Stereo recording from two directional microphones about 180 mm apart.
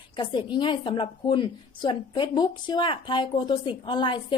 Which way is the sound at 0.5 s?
25° left (ahead or behind).